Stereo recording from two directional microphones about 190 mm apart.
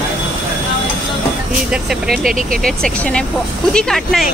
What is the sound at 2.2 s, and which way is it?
Speech, 45° right (ahead or behind).